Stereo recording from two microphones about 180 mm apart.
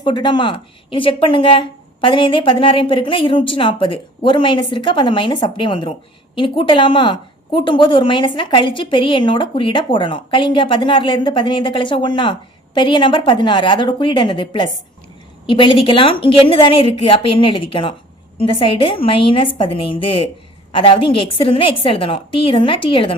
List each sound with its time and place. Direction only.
0.0 s a woman's voice: 25° left (ahead or behind)